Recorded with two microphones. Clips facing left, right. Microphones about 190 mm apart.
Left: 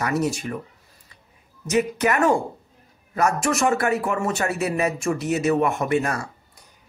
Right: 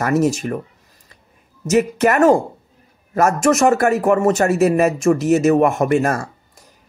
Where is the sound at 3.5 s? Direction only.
40° right (ahead or behind).